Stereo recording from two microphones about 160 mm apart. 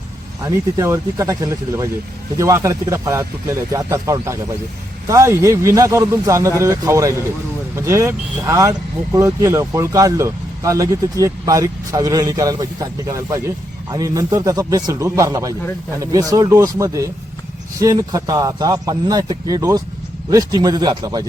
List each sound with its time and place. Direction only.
0.4 s speech: 20° right (ahead or behind)